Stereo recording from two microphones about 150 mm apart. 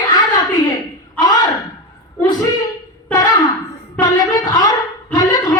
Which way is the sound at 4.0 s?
25° left (ahead or behind).